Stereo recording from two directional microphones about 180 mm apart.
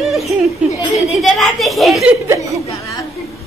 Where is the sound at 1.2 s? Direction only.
Centre (ahead or behind).